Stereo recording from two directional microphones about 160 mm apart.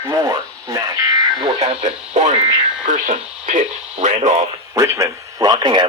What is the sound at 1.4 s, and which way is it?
Radio, 35° right (ahead or behind).